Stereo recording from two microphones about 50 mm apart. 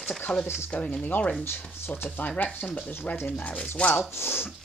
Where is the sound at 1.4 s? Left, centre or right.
Left.